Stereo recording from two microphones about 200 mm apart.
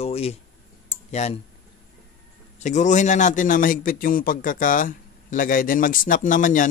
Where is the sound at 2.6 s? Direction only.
35° left (ahead or behind).